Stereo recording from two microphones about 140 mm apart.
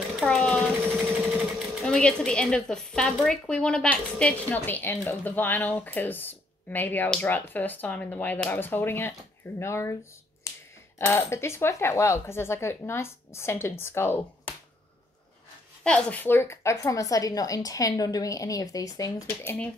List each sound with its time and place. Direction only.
0.2 s speech: 10° left (ahead or behind)
1.8 s a woman's voice: 5° left (ahead or behind)
10.4 s finger snapping: 20° left (ahead or behind)
11.0 s speech: 20° left (ahead or behind)
15.8 s a woman's voice: 5° left (ahead or behind)